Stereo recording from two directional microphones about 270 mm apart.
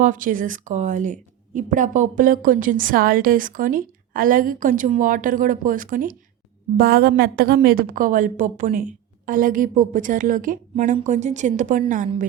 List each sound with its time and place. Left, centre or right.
0.0 s a woman's voice: right